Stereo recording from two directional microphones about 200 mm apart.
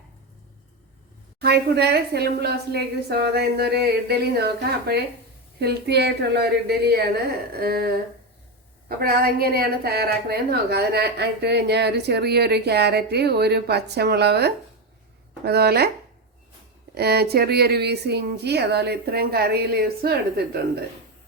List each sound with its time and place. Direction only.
1.4 s a woman's voice: 55° right (ahead or behind)
9.0 s a woman's voice: 50° right (ahead or behind)
16.9 s a woman's voice: 55° right (ahead or behind)